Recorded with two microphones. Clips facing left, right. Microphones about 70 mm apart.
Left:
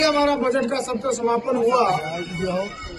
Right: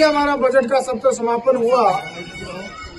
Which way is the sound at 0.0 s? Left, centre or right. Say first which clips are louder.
Right 4 dB; right.